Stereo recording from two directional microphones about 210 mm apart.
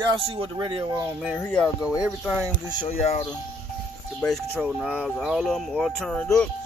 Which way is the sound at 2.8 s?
30° left (ahead or behind).